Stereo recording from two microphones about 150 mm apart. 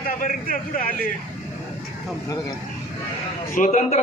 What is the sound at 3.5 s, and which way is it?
Speech, 60° left (ahead or behind).